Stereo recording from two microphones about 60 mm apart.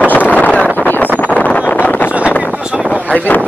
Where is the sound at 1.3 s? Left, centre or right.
Left.